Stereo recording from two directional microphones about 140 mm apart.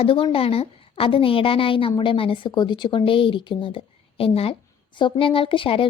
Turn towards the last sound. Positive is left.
turn(degrees=40)  # may be behind; listen again after turning